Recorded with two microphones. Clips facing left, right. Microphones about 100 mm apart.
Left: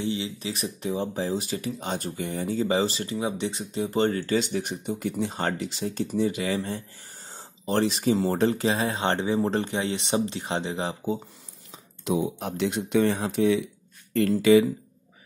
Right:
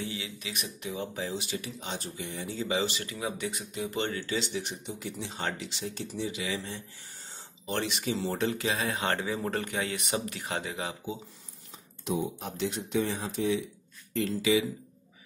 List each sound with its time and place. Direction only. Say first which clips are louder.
0.0 s speech: left 8 dB; 25° left (ahead or behind)
12.0 s speech: left 5 dB; 80° left
14.1 s speech: left 8 dB; 55° left (ahead or behind)